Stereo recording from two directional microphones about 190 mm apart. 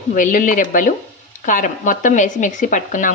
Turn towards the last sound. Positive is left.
turn(degrees=40)  # may be behind; listen again after turning